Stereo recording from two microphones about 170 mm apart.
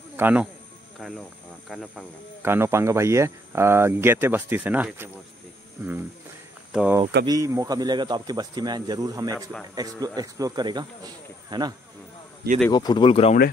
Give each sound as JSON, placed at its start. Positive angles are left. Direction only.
{"t": 0.2, "sound": "speech", "side_deg": -10}
{"t": 0.9, "sound": "speech", "side_deg": 0}
{"t": 2.4, "sound": "speech", "side_deg": -15}
{"t": 7.2, "sound": "speech", "side_deg": -20}
{"t": 12.7, "sound": "speech", "side_deg": 25}